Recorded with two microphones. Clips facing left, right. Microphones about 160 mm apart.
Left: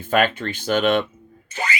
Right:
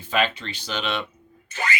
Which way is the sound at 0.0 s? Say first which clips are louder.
Left 5 dB; 50° left (ahead or behind).